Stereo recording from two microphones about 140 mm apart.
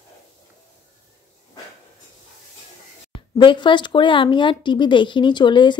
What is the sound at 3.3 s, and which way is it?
Speech, 35° left (ahead or behind).